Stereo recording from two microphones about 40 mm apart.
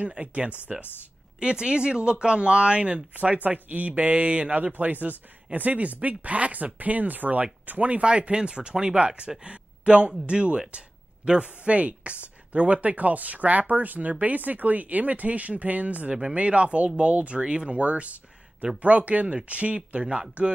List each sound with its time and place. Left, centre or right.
0.0 s speech: right
1.4 s speech: right
3.4 s speech: right
8.0 s speech: right